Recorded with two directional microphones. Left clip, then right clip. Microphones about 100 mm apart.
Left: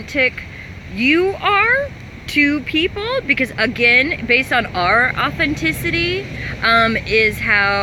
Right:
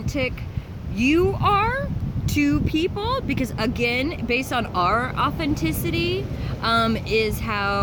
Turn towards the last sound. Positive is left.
turn(degrees=-35)  # may be behind; listen again after turning